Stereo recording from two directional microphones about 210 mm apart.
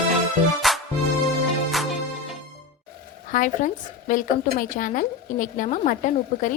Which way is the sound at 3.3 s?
40° left (ahead or behind).